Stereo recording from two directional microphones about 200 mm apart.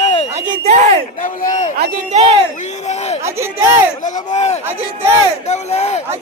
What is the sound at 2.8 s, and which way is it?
Speech, 35° left (ahead or behind).